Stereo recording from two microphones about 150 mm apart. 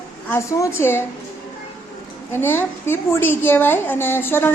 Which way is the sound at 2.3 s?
15° left (ahead or behind).